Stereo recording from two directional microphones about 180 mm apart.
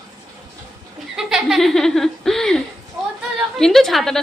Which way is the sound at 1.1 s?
Centre (ahead or behind).